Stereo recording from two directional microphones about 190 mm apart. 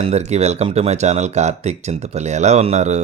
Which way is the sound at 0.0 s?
35° right (ahead or behind).